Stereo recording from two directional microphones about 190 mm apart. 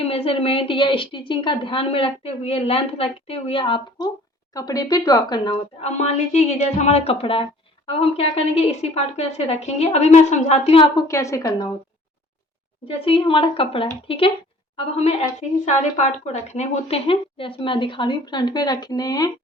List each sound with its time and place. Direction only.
0.0 s a woman's voice: 30° left (ahead or behind)
5.8 s a woman's voice: 35° left (ahead or behind)
10.9 s a woman's voice: 15° left (ahead or behind)
12.9 s speech: 30° left (ahead or behind)